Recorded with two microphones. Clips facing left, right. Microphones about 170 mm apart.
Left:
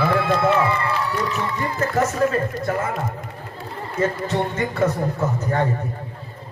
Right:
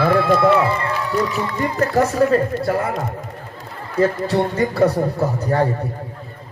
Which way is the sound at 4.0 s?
35° right (ahead or behind).